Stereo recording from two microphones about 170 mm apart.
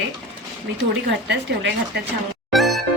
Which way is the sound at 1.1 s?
90° right.